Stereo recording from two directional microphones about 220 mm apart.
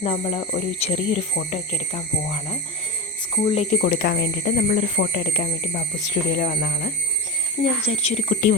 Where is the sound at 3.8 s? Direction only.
40° left (ahead or behind).